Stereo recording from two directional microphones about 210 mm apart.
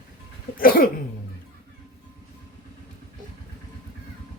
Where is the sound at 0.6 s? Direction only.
45° left (ahead or behind).